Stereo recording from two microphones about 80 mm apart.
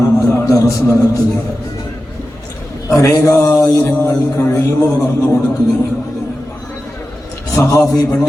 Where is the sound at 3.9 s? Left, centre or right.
Centre.